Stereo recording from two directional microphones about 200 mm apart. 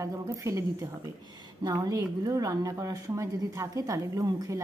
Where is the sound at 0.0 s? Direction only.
15° right (ahead or behind).